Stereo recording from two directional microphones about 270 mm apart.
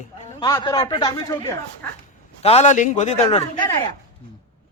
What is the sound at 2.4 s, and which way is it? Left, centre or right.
Speech, left.